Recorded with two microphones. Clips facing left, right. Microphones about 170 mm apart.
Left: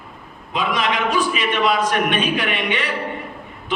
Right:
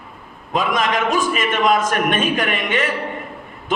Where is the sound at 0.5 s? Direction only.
45° right (ahead or behind).